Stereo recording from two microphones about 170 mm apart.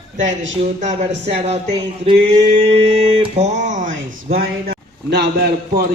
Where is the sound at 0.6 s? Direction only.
45° right (ahead or behind).